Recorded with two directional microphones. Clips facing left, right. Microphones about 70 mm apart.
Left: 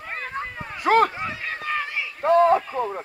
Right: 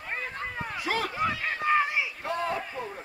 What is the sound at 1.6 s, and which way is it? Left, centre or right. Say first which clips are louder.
Run: right 4 dB; centre.